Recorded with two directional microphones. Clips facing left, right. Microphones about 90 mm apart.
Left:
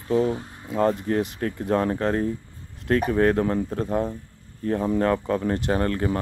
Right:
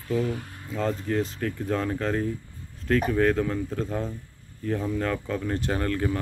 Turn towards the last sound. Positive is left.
turn(degrees=30)  # may be behind; listen again after turning